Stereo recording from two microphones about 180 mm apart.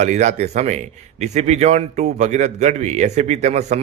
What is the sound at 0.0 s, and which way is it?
A man's voice, 40° right (ahead or behind).